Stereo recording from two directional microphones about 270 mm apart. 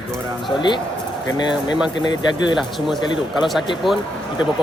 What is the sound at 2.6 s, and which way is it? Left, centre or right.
Speech, centre.